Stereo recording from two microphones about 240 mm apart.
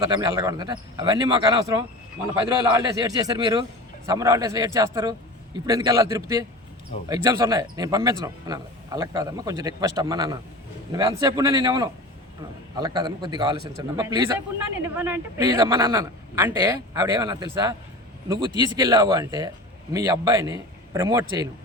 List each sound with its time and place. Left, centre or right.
0.0 s speech: centre